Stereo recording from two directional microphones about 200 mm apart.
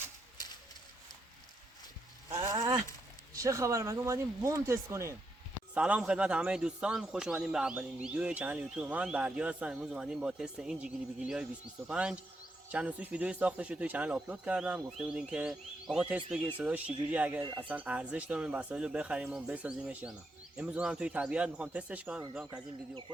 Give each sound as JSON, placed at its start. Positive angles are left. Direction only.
{"t": 2.3, "sound": "a man's voice", "side_deg": -15}